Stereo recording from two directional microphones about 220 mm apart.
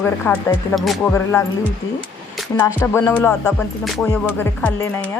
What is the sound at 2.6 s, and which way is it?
Speech, 10° left (ahead or behind).